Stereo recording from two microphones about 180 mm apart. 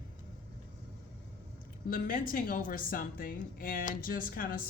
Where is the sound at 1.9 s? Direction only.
50° left (ahead or behind).